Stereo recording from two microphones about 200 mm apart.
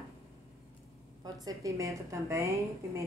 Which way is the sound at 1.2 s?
15° right (ahead or behind).